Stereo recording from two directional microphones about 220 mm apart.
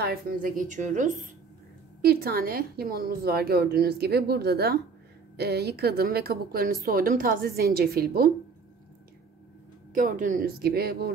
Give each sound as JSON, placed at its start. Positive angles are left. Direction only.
{"t": 0.0, "sound": "a woman's voice", "side_deg": -40}
{"t": 9.9, "sound": "a woman's voice", "side_deg": -35}